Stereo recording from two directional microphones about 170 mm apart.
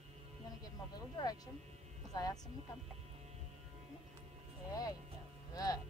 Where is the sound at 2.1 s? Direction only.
20° left (ahead or behind).